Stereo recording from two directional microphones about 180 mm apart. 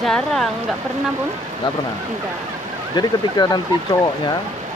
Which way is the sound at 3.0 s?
20° left (ahead or behind).